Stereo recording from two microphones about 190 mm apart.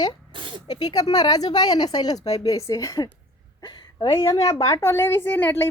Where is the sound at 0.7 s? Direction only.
20° left (ahead or behind).